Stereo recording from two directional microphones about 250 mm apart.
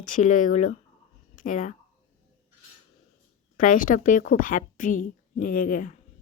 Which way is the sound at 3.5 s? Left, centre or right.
Left.